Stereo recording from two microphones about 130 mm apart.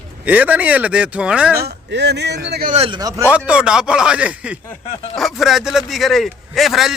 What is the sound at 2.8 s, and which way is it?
Speech, 40° right (ahead or behind).